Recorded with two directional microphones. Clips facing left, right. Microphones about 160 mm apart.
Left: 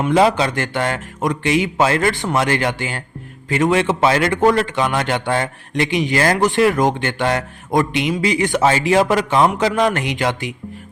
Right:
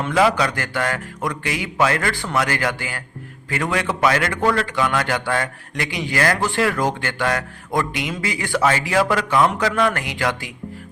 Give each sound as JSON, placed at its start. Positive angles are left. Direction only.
{"t": 0.1, "sound": "a man's voice", "side_deg": 25}